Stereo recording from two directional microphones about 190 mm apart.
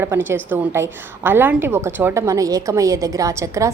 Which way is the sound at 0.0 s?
10° right (ahead or behind).